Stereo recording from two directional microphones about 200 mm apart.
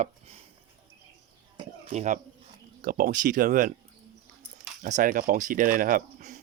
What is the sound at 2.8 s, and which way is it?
Speech, 45° right (ahead or behind).